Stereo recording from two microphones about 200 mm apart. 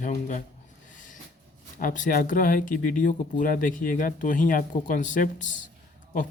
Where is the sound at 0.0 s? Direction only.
40° left (ahead or behind).